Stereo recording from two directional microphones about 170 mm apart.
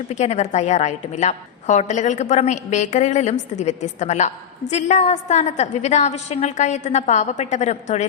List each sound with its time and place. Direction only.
0.1 s a woman's voice: 40° left (ahead or behind)